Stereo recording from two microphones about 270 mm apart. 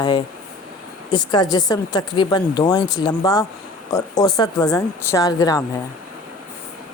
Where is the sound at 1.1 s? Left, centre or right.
Centre.